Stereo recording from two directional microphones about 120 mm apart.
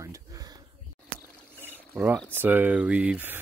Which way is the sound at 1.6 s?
15° right (ahead or behind).